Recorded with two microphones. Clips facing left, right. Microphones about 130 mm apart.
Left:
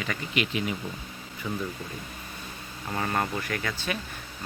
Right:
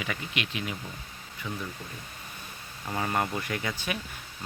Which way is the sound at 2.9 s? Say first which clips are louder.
Even; 10° right (ahead or behind).